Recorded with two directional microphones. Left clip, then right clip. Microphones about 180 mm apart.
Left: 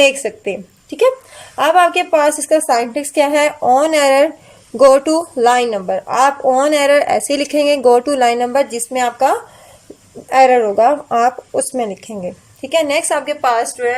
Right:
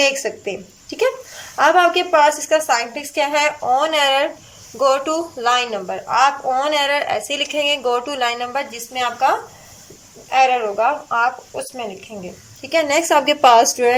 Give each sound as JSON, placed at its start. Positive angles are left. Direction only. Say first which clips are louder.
{"t": 0.0, "sound": "speech", "louder": "left 5 dB", "side_deg": 20}
{"t": 13.2, "sound": "speech", "louder": "right 4 dB", "side_deg": -10}